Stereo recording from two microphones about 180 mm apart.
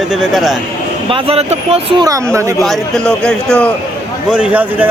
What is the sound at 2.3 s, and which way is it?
Speech, 15° right (ahead or behind).